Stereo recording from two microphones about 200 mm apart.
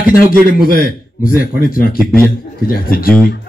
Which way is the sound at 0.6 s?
45° left (ahead or behind).